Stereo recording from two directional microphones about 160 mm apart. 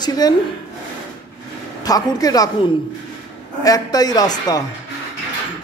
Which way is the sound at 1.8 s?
25° left (ahead or behind).